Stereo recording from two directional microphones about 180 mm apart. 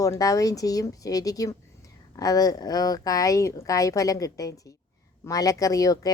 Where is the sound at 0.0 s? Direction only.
20° left (ahead or behind).